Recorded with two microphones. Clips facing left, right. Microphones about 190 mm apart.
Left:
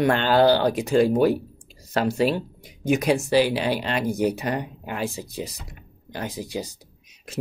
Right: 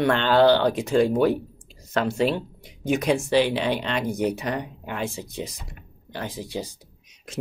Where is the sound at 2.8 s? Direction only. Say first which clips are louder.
Left 1 dB; 10° left (ahead or behind).